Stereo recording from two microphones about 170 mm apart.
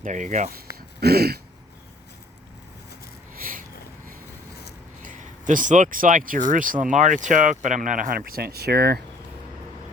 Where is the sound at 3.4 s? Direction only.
55° right (ahead or behind).